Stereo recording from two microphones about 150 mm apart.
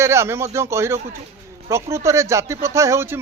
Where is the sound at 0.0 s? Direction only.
20° right (ahead or behind).